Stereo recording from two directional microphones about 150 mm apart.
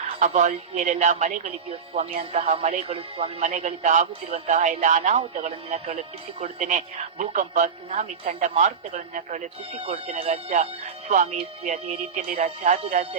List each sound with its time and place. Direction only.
0.0 s speech: 55° right (ahead or behind)
9.7 s speech: 40° right (ahead or behind)